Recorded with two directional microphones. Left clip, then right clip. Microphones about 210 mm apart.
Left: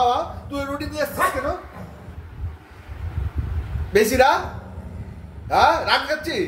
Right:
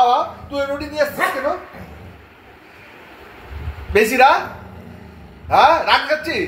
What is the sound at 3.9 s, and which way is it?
Speech, 10° left (ahead or behind).